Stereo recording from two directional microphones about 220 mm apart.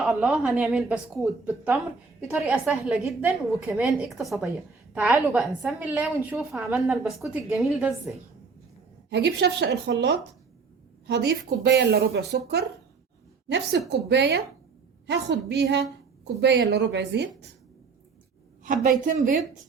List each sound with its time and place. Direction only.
0.0 s a woman's voice: 5° right (ahead or behind)
9.0 s a woman's voice: 50° right (ahead or behind)
11.0 s a woman's voice: 50° right (ahead or behind)
13.5 s a woman's voice: 50° right (ahead or behind)
18.6 s a woman's voice: 35° right (ahead or behind)